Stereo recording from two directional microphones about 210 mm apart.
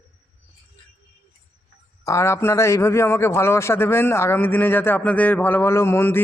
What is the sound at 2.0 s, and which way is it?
Speech, 15° left (ahead or behind).